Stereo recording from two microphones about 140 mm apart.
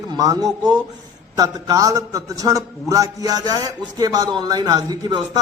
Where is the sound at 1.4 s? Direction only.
25° right (ahead or behind).